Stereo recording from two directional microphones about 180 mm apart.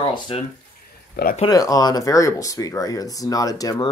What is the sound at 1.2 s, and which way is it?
Speech, 65° left (ahead or behind).